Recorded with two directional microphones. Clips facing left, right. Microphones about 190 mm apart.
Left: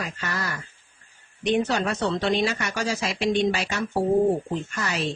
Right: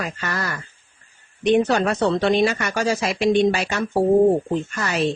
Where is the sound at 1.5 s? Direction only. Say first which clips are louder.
Right 5 dB; 60° right (ahead or behind).